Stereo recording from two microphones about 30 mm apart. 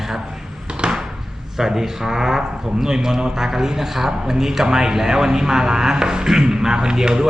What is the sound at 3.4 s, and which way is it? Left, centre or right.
Speech, centre.